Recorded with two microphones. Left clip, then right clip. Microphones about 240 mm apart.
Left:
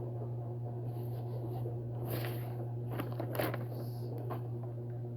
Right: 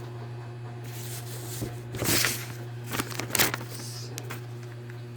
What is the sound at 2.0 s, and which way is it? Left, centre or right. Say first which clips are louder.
Music: right 16 dB; right.